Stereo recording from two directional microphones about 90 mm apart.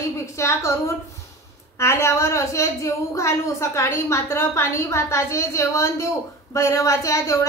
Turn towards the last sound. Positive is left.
turn(degrees=35)  # may be behind; listen again after turning